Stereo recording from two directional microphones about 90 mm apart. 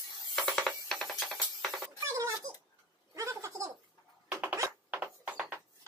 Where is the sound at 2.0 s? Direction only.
35° right (ahead or behind).